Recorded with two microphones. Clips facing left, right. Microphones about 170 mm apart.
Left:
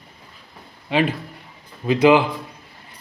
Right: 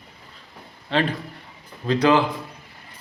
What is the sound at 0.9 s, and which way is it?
Speech, 10° left (ahead or behind).